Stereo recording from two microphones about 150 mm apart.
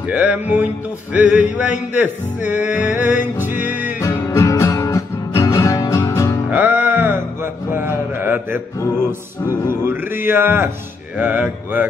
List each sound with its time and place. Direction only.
0.1 s music: 10° right (ahead or behind)
4.0 s music: 20° left (ahead or behind)
6.5 s a sound: 10° right (ahead or behind)
9.7 s music: 15° right (ahead or behind)